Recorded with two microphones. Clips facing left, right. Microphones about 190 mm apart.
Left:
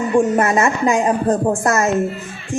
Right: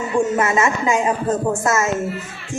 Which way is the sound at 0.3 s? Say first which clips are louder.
Left 2 dB; 50° left (ahead or behind).